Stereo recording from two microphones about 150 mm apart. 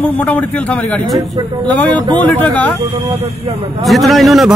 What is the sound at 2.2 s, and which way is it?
Speech, 10° left (ahead or behind).